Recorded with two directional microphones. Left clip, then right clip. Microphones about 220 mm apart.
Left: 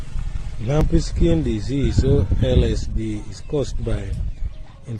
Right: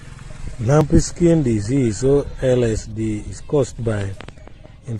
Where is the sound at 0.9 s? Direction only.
15° right (ahead or behind).